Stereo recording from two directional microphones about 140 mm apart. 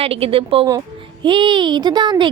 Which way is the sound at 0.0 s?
45° right (ahead or behind).